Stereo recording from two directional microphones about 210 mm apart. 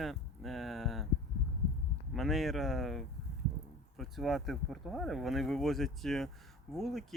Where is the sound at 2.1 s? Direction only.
Centre (ahead or behind).